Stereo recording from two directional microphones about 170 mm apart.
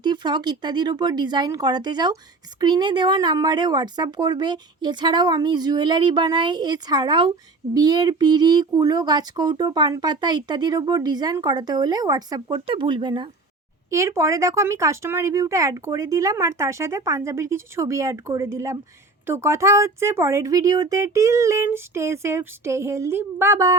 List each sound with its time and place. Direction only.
0.0 s speech: 25° right (ahead or behind)
12.5 s speech: 35° right (ahead or behind)
13.9 s speech: 15° right (ahead or behind)